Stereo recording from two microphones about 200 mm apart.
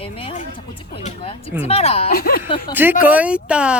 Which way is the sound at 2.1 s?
50° left (ahead or behind).